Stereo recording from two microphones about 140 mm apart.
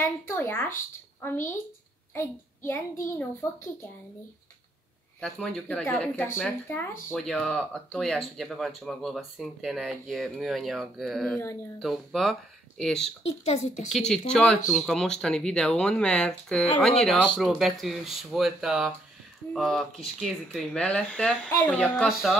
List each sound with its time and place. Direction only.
0.0 s a child's voice: 15° left (ahead or behind)
5.2 s speech: 5° left (ahead or behind)
7.1 s speech: centre (ahead or behind)
13.2 s a woman's voice: 50° left (ahead or behind)
13.9 s speech: 5° left (ahead or behind)